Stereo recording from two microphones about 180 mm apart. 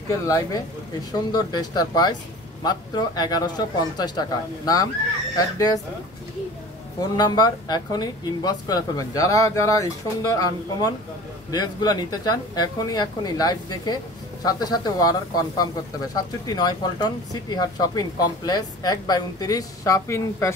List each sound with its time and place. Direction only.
0.1 s speech: 20° left (ahead or behind)
7.0 s speech: 25° left (ahead or behind)